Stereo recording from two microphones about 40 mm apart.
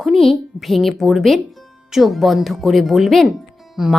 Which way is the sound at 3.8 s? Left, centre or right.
Centre.